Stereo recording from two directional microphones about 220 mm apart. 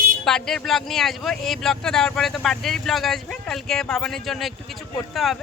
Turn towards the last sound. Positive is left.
turn(degrees=0)  # may be behind; listen again after turning